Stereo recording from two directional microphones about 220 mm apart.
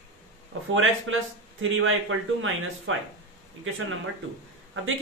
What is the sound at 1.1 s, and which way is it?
Speech, 60° right (ahead or behind).